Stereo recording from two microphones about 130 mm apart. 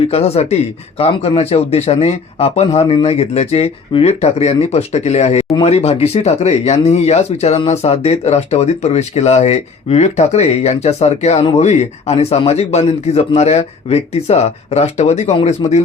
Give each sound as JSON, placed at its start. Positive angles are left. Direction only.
{"t": 0.1, "sound": "speech", "side_deg": 50}